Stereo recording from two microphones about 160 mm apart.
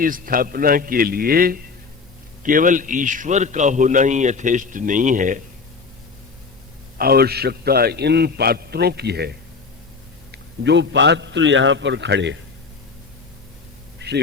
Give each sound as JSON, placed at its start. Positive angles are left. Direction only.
{"t": 0.0, "sound": "a man's voice", "side_deg": -60}
{"t": 2.4, "sound": "a man's voice", "side_deg": -55}
{"t": 7.0, "sound": "a man's voice", "side_deg": -70}
{"t": 10.3, "sound": "a man's voice", "side_deg": -90}
{"t": 14.0, "sound": "a sound", "side_deg": -90}